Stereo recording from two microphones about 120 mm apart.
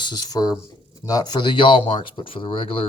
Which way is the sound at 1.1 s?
35° left (ahead or behind).